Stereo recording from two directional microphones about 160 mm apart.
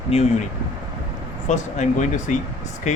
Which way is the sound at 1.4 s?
45° left (ahead or behind).